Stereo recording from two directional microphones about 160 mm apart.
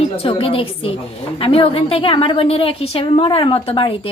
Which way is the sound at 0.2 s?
35° left (ahead or behind).